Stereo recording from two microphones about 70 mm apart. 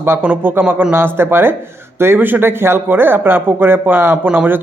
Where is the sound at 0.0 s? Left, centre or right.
Right.